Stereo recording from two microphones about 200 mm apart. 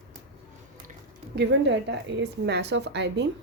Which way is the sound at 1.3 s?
60° right (ahead or behind).